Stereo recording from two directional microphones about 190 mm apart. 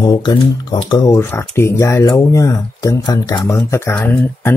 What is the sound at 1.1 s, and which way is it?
Speech, 10° left (ahead or behind).